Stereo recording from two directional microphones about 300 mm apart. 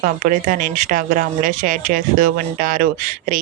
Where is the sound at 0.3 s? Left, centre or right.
Right.